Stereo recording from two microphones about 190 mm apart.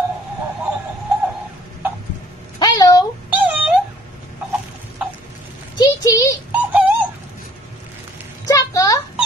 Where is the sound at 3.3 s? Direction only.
10° right (ahead or behind).